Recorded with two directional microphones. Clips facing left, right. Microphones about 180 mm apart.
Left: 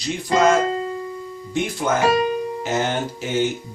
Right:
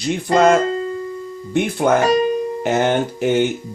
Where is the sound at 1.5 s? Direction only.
55° right (ahead or behind).